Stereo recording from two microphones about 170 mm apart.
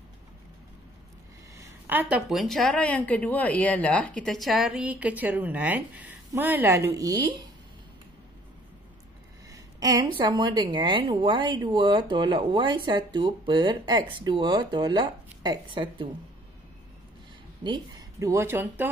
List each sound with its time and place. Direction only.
1.6 s a woman's voice: 10° right (ahead or behind)
9.5 s a woman's voice: 20° right (ahead or behind)
17.6 s speech: 20° right (ahead or behind)